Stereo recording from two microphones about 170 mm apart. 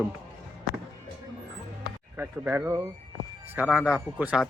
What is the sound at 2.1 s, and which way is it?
Speech, 15° right (ahead or behind).